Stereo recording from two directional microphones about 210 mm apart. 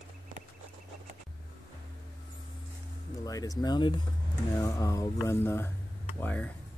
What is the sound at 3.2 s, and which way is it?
Speech, 15° left (ahead or behind).